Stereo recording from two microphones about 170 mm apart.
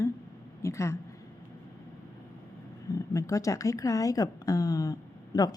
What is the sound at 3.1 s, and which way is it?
A woman's voice, 20° left (ahead or behind).